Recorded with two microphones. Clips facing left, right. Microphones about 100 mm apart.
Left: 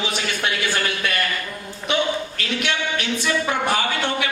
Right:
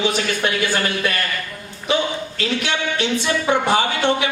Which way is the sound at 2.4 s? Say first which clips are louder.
Right 2 dB; 30° right (ahead or behind).